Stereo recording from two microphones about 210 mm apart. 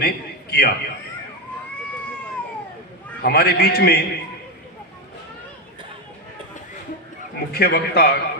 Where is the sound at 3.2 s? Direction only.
50° left (ahead or behind).